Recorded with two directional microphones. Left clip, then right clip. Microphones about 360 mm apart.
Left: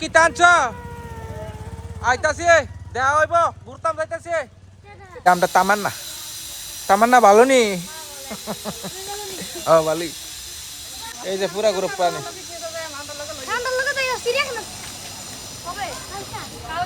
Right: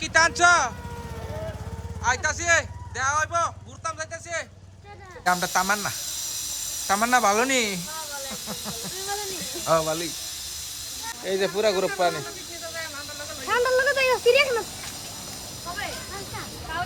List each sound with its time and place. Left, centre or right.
0.0 s speech: centre
2.0 s speech: centre
9.6 s speech: centre
11.3 s speech: centre
13.5 s a sound: centre